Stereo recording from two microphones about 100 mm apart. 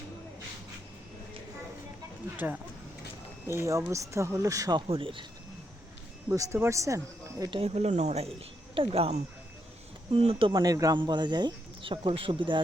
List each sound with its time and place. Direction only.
2.3 s speech: 20° right (ahead or behind); by 4.8 s 35° right (ahead or behind)
4.9 s speech: 60° right (ahead or behind)
6.3 s speech: 30° right (ahead or behind)
7.6 s speech: 90° right
8.7 s speech: 70° right (ahead or behind)
10.1 s speech: 65° right (ahead or behind)
10.5 s speech: 40° right (ahead or behind)
10.9 s speech: 50° right (ahead or behind)